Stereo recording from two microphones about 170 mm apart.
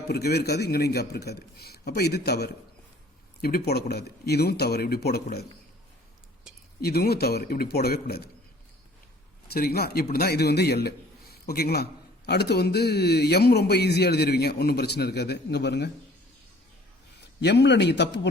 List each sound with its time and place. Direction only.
0.1 s a man's voice: 70° left (ahead or behind)
6.5 s a sound: 5° right (ahead or behind)
6.8 s a man's voice: 65° left (ahead or behind)
9.5 s a man's voice: 65° left (ahead or behind); by 15.9 s 80° left
17.4 s a man's voice: 85° left